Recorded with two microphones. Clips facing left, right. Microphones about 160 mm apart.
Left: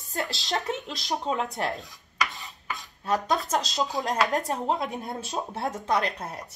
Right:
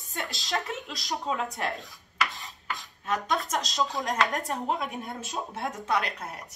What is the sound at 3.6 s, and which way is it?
Speech, centre (ahead or behind).